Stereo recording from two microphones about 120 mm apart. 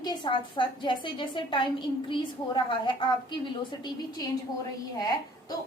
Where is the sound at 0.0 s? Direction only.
40° left (ahead or behind).